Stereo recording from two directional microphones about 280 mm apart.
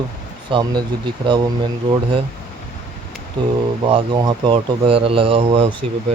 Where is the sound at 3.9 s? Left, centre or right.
Centre.